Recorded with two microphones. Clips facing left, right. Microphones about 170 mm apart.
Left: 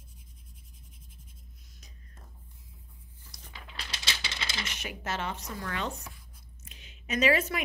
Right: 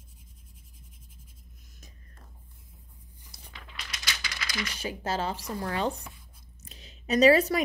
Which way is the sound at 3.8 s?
30° left (ahead or behind).